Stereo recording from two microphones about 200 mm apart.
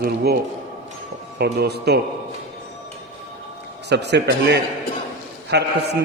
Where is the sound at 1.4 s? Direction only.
55° right (ahead or behind).